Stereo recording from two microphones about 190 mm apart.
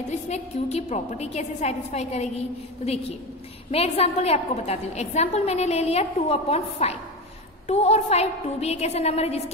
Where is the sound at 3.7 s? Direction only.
35° left (ahead or behind).